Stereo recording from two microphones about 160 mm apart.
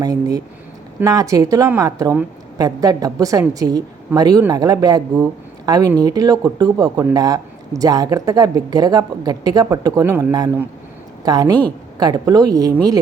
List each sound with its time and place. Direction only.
0.0 s a woman's voice: 20° right (ahead or behind)